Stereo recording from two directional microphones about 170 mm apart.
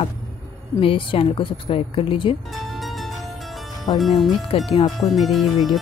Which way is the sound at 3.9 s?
Centre (ahead or behind).